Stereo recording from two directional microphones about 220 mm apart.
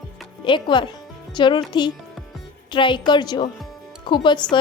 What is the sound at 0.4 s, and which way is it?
A woman's voice, 20° left (ahead or behind).